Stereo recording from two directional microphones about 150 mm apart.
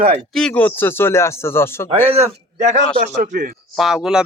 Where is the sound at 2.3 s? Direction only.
55° right (ahead or behind).